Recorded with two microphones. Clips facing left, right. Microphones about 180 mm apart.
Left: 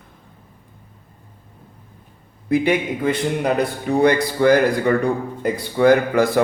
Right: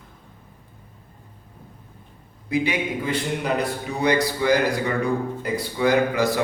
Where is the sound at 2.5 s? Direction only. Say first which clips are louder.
Left 5 dB; 55° left (ahead or behind).